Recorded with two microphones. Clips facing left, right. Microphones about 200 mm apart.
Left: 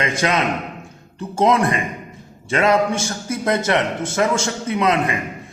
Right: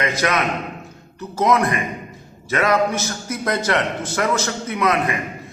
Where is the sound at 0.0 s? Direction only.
25° left (ahead or behind).